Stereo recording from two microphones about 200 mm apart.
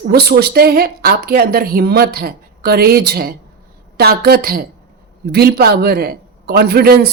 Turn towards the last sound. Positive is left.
turn(degrees=-50)  # may be behind; listen again after turning